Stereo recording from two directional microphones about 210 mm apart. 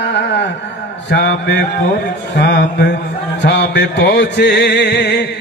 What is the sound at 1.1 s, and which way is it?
Mantra, 55° left (ahead or behind).